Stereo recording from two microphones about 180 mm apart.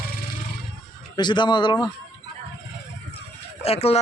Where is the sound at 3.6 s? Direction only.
35° left (ahead or behind).